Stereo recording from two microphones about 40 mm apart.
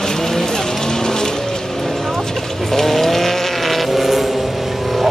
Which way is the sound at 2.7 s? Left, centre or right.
Centre.